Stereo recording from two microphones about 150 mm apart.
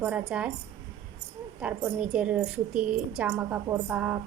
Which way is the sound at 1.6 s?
5° right (ahead or behind).